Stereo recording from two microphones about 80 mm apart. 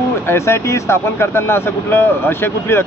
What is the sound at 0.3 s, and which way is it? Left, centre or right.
Speech, left.